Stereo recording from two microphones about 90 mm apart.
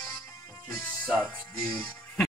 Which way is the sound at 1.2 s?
15° left (ahead or behind).